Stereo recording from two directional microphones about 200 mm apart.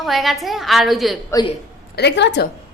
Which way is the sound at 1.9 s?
60° left (ahead or behind).